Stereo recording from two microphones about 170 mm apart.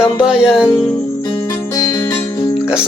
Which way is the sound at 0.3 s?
5° right (ahead or behind).